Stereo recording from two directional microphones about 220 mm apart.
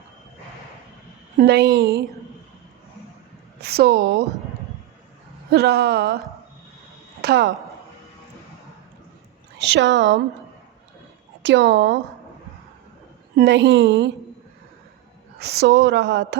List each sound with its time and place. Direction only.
1.4 s a woman's voice: 50° right (ahead or behind)
3.6 s a woman's voice: 45° right (ahead or behind)
5.5 s a woman's voice: 45° right (ahead or behind)
7.2 s speech: 45° right (ahead or behind)
9.6 s a woman's voice: 50° right (ahead or behind)
11.4 s a woman's voice: 55° right (ahead or behind)
13.3 s a woman's voice: 50° right (ahead or behind)
15.4 s a woman's voice: 50° right (ahead or behind)